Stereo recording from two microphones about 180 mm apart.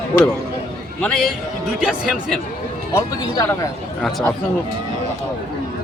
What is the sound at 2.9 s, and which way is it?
Speech, 20° left (ahead or behind).